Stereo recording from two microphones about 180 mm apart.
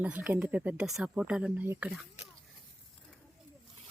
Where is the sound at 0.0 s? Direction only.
10° right (ahead or behind).